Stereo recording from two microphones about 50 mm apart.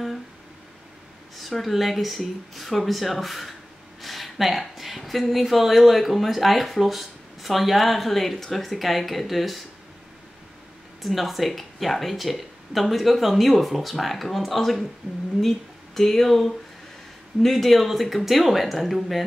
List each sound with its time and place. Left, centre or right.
1.4 s speech: centre
11.0 s speech: centre